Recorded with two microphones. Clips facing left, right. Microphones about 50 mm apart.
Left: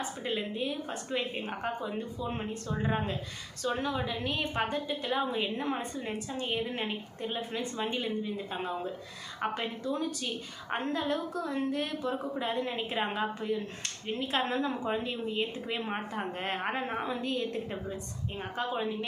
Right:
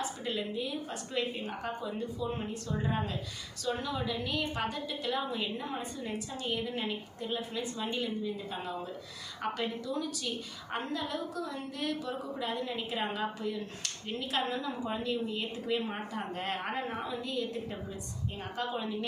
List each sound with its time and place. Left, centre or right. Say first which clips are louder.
0.3 s a woman's voice: left 3 dB; left
5.5 s a woman's voice: left 4 dB; left
14.8 s a woman's voice: left 1 dB; left
18.5 s a woman's voice: left 3 dB; left